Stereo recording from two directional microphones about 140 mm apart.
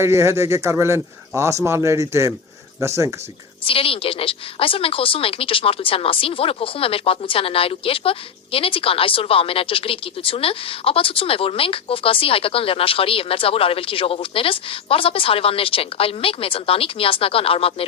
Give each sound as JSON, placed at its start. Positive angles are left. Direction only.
{"t": 0.0, "sound": "speech", "side_deg": -20}
{"t": 3.7, "sound": "speech", "side_deg": 40}